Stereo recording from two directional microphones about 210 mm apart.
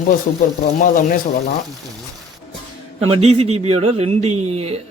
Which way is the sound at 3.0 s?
30° right (ahead or behind).